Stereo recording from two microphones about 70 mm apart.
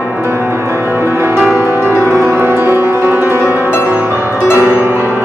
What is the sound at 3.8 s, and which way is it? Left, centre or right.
Music, right.